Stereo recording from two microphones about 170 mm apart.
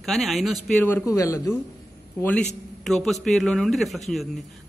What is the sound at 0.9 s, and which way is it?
A man's voice, 15° left (ahead or behind).